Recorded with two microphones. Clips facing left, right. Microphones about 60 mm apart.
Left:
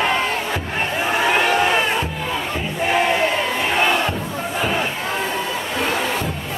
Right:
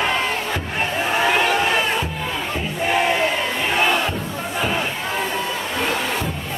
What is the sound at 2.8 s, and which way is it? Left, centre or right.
Battle cry, centre.